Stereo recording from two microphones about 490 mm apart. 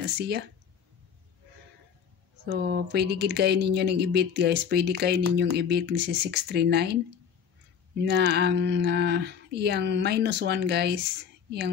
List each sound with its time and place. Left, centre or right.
0.0 s speech: centre
2.4 s speech: centre
8.0 s speech: centre